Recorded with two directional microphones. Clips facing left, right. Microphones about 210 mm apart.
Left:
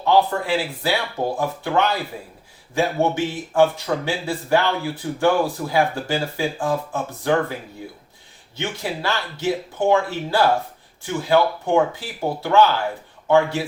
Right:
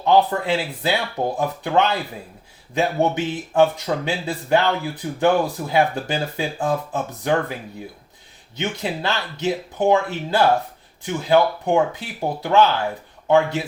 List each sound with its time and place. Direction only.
0.0 s speech: 20° right (ahead or behind)
8.5 s speech: 20° right (ahead or behind)